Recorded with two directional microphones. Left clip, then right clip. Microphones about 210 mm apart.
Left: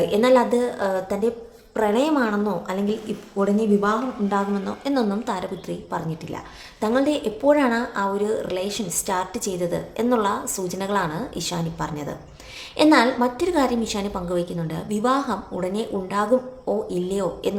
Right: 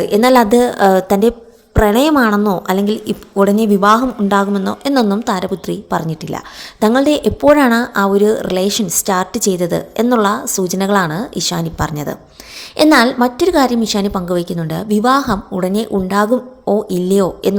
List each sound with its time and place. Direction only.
0.0 s a woman's voice: 35° right (ahead or behind)